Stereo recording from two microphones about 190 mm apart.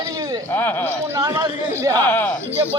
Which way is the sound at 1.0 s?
15° right (ahead or behind).